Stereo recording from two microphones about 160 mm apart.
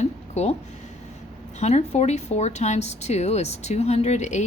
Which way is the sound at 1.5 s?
45° left (ahead or behind).